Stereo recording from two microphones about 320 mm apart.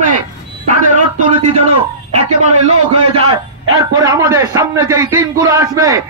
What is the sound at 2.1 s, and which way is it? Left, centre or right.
A man's voice, right.